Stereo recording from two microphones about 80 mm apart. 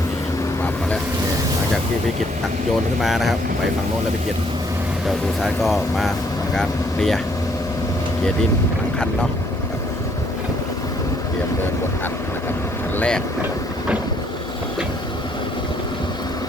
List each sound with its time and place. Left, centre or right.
3.0 s speech: centre
5.0 s speech: centre
13.0 s speech: centre